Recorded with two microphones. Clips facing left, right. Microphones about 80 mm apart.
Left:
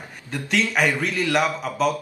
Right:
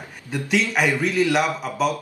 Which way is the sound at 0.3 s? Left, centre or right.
Centre.